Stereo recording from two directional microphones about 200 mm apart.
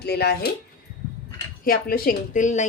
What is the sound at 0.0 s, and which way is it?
Speech, 55° left (ahead or behind).